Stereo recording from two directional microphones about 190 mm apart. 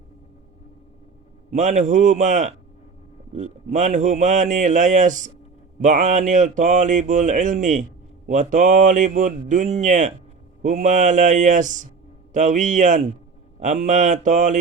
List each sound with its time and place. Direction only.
1.5 s speech: 40° right (ahead or behind)